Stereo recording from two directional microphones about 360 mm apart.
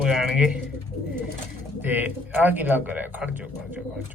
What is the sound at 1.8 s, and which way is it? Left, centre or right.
Speech, centre.